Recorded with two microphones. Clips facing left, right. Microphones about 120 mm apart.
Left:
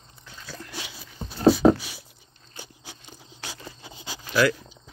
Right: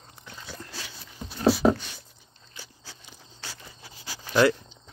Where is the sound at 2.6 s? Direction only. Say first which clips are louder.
Left 4 dB; 15° left (ahead or behind).